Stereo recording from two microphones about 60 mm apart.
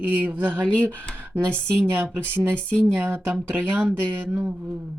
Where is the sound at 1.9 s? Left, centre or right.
Right.